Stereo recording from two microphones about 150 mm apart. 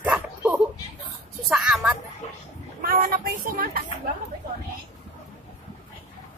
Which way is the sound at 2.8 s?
75° right (ahead or behind).